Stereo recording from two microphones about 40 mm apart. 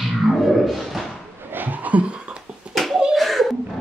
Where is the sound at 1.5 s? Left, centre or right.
Right.